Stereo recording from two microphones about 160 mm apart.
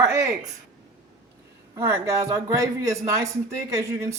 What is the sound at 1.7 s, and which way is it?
Speech, 15° right (ahead or behind).